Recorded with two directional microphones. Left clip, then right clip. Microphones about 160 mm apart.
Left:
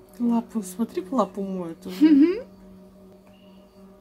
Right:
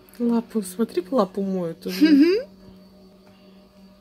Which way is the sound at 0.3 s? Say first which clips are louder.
Right 2 dB; 45° right (ahead or behind).